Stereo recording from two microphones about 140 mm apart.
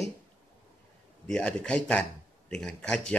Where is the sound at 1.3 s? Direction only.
10° left (ahead or behind).